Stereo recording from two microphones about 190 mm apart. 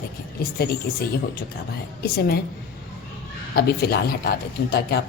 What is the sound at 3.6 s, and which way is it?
Speech, 55° left (ahead or behind).